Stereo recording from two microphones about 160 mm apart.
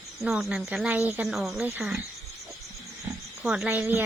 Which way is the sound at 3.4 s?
5° right (ahead or behind).